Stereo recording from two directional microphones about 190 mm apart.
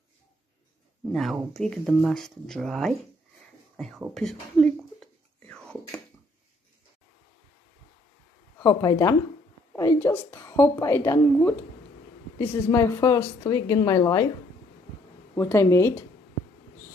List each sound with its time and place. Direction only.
1.1 s speech: centre (ahead or behind)
4.1 s whispering: centre (ahead or behind)
8.5 s a woman's voice: 15° left (ahead or behind)
15.3 s a woman's voice: 15° left (ahead or behind)